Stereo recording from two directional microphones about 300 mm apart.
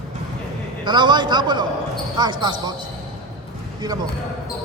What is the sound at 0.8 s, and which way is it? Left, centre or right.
A man's voice, centre.